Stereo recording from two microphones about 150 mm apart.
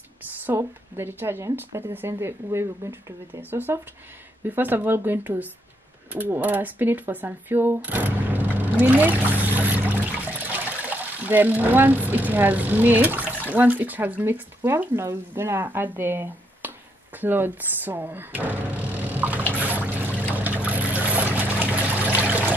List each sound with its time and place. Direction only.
0.4 s a woman's voice: 15° right (ahead or behind)
19.6 s trickle: 10° right (ahead or behind)